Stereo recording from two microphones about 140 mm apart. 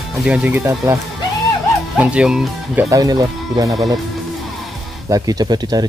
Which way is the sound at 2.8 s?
25° right (ahead or behind).